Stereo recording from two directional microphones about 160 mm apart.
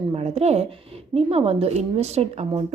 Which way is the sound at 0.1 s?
40° right (ahead or behind).